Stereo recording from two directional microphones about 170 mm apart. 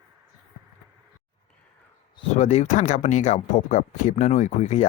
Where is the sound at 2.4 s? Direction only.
40° left (ahead or behind).